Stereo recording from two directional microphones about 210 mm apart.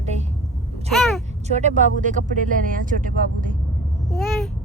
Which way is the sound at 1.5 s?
35° right (ahead or behind).